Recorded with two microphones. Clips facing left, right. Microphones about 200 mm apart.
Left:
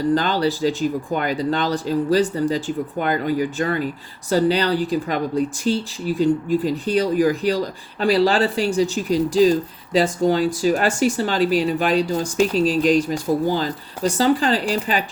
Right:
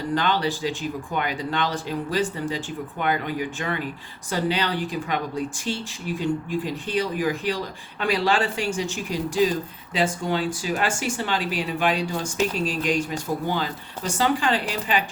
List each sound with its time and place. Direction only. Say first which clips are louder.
0.1 s speech: left 2 dB; 40° left (ahead or behind)